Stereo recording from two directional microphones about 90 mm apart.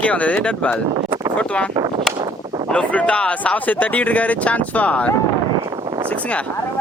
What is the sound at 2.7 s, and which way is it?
Speech, 15° left (ahead or behind).